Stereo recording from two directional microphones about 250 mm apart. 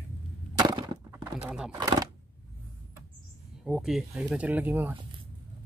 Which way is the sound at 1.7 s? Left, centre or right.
Centre.